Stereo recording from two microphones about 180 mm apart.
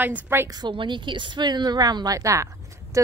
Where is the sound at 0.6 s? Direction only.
25° right (ahead or behind).